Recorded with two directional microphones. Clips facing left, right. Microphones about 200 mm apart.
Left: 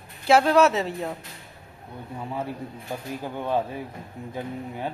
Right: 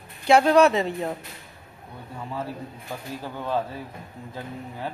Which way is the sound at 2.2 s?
20° left (ahead or behind).